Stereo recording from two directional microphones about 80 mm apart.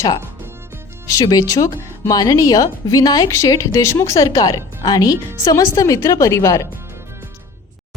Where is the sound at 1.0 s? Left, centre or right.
Left.